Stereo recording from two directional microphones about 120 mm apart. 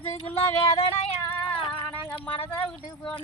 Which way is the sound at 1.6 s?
40° left (ahead or behind).